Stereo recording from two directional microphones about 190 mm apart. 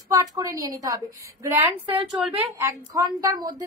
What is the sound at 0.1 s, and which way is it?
A woman's voice, 15° right (ahead or behind).